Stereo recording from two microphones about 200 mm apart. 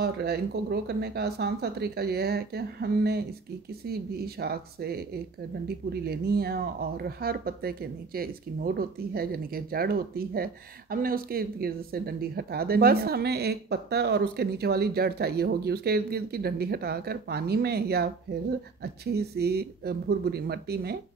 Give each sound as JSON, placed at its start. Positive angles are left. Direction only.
{"t": 0.0, "sound": "speech", "side_deg": -55}
{"t": 6.0, "sound": "speech", "side_deg": -50}